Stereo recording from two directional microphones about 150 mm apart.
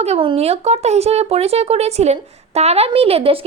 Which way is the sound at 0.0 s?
45° right (ahead or behind).